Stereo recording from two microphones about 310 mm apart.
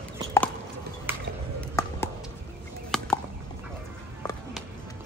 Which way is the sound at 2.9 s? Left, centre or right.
Centre.